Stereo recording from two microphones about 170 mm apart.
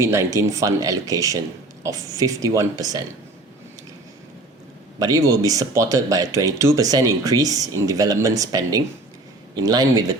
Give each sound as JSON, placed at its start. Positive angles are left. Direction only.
{"t": 0.0, "sound": "speech", "side_deg": -15}
{"t": 4.9, "sound": "speech", "side_deg": -20}